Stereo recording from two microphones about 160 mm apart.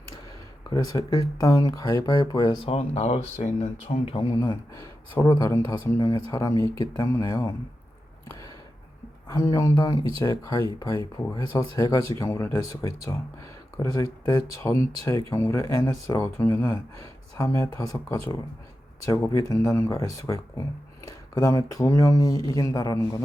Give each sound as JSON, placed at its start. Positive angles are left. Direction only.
{"t": 0.7, "sound": "speech", "side_deg": 20}
{"t": 2.6, "sound": "speech", "side_deg": 40}
{"t": 4.4, "sound": "speech", "side_deg": 20}
{"t": 9.3, "sound": "speech", "side_deg": 20}